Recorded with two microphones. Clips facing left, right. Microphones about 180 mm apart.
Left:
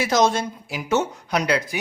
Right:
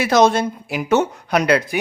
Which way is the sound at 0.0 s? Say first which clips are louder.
Right 5 dB; 60° right (ahead or behind).